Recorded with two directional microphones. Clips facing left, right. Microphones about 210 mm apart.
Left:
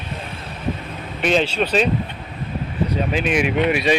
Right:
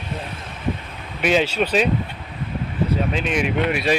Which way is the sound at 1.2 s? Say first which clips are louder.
Even; 10° right (ahead or behind).